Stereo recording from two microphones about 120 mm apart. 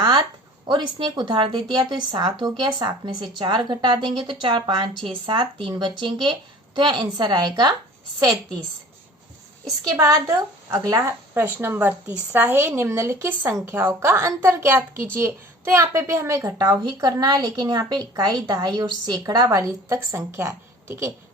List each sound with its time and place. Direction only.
0.0 s a sound: 35° right (ahead or behind)
0.7 s a woman's voice: 40° right (ahead or behind)
10.7 s a woman's voice: 30° right (ahead or behind)
11.3 s a woman's voice: 15° right (ahead or behind)
16.5 s a woman's voice: 35° right (ahead or behind)